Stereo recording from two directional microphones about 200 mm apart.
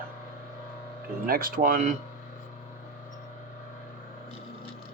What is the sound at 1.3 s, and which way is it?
Speech, 45° right (ahead or behind).